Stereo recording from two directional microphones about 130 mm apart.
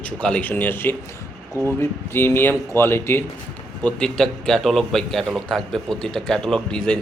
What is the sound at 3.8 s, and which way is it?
A man's voice, 5° left (ahead or behind).